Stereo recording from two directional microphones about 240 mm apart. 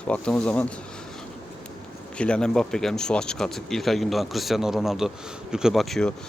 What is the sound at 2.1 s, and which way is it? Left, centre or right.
Speech, centre.